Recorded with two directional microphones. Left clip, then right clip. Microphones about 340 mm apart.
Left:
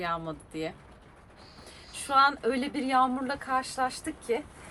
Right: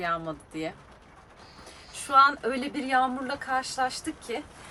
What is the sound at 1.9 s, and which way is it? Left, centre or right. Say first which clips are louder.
A woman's voice: right 3 dB; centre.